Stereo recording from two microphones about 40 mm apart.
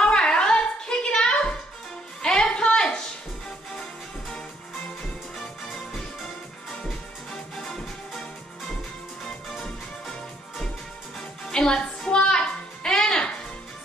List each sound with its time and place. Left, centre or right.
0.0 s a sound: left
2.2 s music: centre
5.4 s music: centre
7.5 s music: centre
11.1 s music: centre